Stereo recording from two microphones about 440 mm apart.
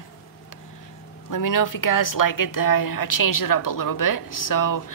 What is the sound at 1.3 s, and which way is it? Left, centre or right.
A woman's voice, left.